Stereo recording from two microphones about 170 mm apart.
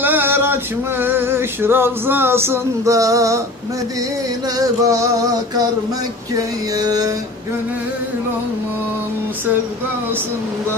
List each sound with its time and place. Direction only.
0.0 s a sound: 10° right (ahead or behind)
1.0 s male singing: 15° right (ahead or behind)
4.6 s male singing: 20° right (ahead or behind)